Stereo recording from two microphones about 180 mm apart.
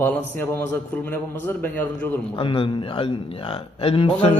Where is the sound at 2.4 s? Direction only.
30° left (ahead or behind).